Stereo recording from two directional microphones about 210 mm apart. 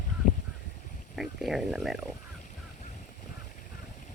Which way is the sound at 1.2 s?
Centre (ahead or behind).